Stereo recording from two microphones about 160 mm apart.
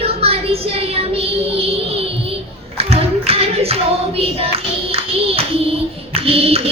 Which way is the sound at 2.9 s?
40° right (ahead or behind).